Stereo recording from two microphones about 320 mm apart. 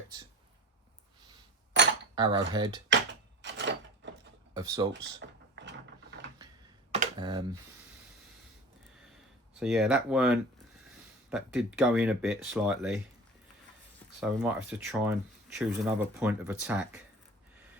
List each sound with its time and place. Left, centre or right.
1.7 s cutlery: right
2.1 s cutlery: centre
2.5 s speech: centre
2.9 s door: right
4.5 s speech: centre
5.2 s mechanisms: right
6.9 s computer keyboard: centre
9.6 s speech: centre
14.2 s speech: centre